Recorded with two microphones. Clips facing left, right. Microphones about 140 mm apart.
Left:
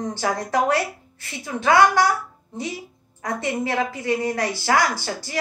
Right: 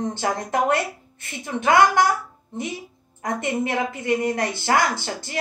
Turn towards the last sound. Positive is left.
turn(degrees=-20)  # may be behind; listen again after turning